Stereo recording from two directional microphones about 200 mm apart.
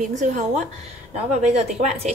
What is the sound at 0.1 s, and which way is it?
A woman's voice, 35° right (ahead or behind).